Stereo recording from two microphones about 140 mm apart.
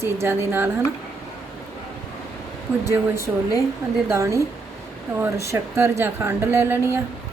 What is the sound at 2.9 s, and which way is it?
Speech, 20° right (ahead or behind).